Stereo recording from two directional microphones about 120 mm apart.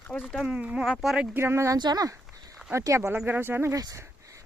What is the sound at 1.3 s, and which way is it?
Speech, 20° right (ahead or behind).